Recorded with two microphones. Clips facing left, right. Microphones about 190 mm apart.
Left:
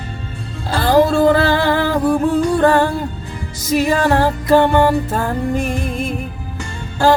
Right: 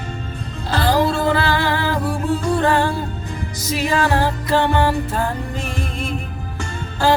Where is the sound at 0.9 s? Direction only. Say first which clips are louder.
Left 7 dB; 50° left (ahead or behind).